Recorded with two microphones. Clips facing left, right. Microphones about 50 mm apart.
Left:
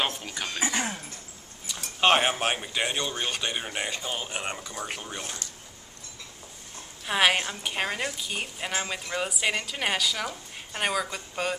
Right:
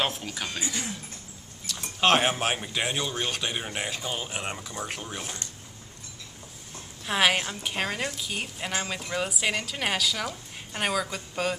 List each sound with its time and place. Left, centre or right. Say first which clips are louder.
0.0 s a woman's voice: right 1 dB; centre
0.6 s speech: left 4 dB; left
2.0 s a woman's voice: even; centre
7.1 s a woman's voice: left 1 dB; centre